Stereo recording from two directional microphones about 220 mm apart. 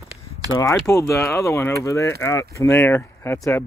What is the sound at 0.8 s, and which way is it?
Speech, 15° left (ahead or behind).